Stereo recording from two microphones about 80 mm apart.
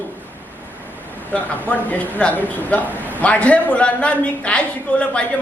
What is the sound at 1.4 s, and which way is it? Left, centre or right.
A woman's voice, centre.